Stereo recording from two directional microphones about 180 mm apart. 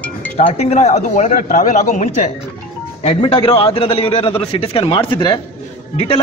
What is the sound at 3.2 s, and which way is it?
A man's voice, 30° left (ahead or behind).